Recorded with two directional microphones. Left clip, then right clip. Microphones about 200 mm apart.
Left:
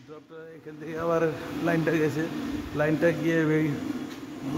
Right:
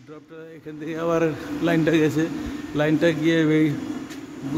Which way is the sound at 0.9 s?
25° right (ahead or behind).